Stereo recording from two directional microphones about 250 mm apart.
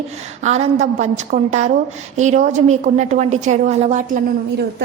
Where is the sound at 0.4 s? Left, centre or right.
Right.